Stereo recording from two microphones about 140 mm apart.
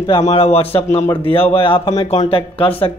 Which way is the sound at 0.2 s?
45° left (ahead or behind).